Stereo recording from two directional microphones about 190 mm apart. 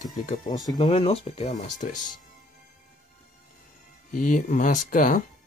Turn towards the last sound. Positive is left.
turn(degrees=45)  # may be behind; listen again after turning